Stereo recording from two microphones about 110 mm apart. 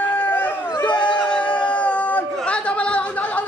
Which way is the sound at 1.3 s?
10° left (ahead or behind).